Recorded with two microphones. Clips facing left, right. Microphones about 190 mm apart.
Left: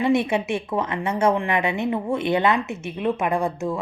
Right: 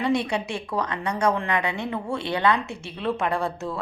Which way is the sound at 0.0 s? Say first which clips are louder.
Left 4 dB; 20° left (ahead or behind).